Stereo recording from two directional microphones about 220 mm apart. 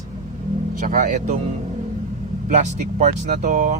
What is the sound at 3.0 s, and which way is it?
Speech, 35° right (ahead or behind).